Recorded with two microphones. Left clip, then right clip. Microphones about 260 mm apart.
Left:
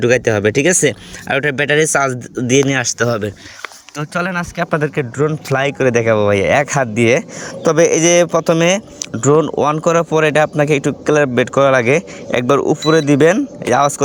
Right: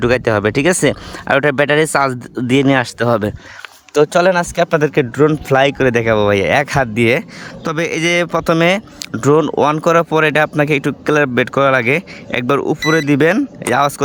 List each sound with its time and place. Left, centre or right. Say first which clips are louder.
0.0 s speech: left 1 dB; centre
7.6 s speech: left 6 dB; centre